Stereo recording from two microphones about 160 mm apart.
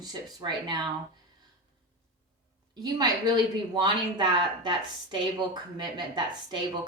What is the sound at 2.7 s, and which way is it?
Speech, 25° right (ahead or behind).